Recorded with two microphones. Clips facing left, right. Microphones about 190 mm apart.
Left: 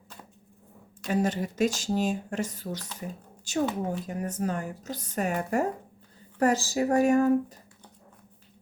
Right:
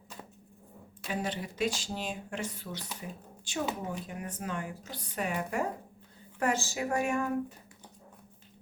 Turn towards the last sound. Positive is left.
turn(degrees=40)  # may be behind; listen again after turning